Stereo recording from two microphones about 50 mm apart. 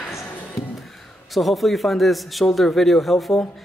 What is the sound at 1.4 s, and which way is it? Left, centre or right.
A man's voice, centre.